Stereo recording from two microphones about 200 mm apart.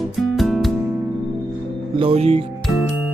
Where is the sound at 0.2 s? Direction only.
Centre (ahead or behind).